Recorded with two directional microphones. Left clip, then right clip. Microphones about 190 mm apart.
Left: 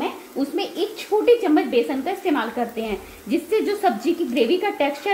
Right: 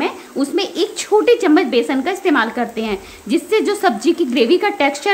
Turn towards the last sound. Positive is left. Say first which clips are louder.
# right 6 dB
turn(degrees=-20)  # may be behind; listen again after turning